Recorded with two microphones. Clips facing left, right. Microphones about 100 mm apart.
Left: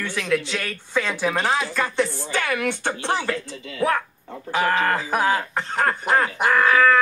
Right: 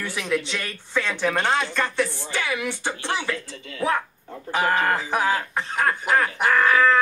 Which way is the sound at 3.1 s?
45° left (ahead or behind).